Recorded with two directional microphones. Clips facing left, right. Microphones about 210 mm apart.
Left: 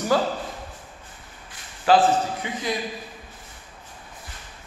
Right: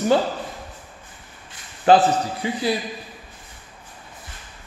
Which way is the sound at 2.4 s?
35° right (ahead or behind).